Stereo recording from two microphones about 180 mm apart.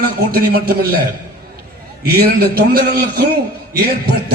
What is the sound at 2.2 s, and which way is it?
A man's voice, 60° right (ahead or behind).